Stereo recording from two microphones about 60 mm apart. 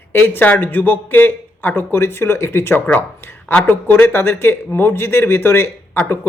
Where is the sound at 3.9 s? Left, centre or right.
Left.